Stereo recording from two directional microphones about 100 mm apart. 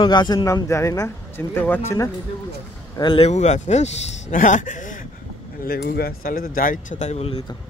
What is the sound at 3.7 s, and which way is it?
Speech, 90° left.